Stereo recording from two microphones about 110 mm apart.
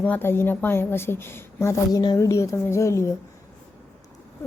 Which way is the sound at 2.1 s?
25° left (ahead or behind).